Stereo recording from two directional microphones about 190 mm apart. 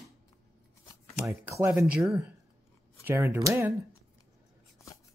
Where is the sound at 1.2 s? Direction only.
15° right (ahead or behind).